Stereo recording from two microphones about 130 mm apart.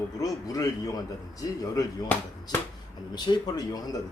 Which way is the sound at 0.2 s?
25° left (ahead or behind).